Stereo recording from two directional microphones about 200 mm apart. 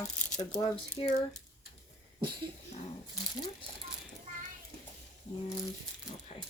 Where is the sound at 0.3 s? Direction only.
25° left (ahead or behind).